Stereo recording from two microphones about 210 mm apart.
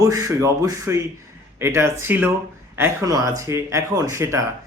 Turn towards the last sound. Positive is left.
turn(degrees=-15)  # may be behind; listen again after turning